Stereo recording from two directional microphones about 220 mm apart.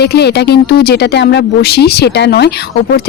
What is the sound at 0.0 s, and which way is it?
Speech, 45° left (ahead or behind).